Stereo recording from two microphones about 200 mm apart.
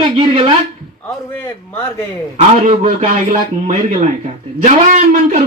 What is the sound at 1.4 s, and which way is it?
Speech, 10° left (ahead or behind).